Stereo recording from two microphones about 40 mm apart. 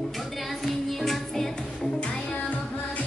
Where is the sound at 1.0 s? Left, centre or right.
Centre.